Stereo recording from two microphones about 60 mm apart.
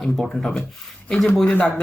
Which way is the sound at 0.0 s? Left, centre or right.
Centre.